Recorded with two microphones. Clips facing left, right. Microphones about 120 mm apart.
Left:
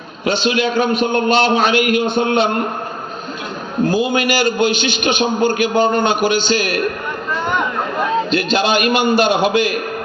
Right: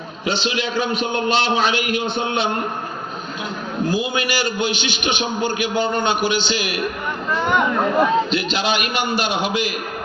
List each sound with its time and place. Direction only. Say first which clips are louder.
0.3 s a man's voice: left 6 dB; 50° left (ahead or behind)
3.8 s a man's voice: left 6 dB; 45° left (ahead or behind)
8.3 s a man's voice: left 5 dB; 50° left (ahead or behind)